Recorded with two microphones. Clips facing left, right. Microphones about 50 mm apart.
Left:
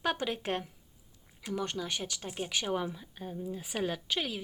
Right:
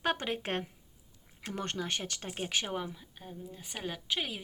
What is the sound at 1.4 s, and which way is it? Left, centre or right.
Speech, right.